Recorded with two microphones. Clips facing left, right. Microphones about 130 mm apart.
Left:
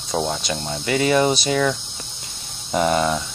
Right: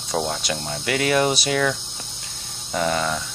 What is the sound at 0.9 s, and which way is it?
Cricket, centre (ahead or behind).